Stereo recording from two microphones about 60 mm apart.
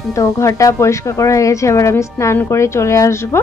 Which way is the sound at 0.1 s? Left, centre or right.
Left.